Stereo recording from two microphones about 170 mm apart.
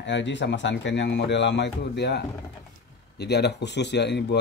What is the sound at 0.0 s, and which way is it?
Speech, 90° left.